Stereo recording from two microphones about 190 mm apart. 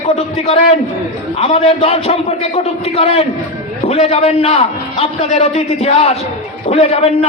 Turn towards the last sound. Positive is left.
turn(degrees=35)  # may be behind; listen again after turning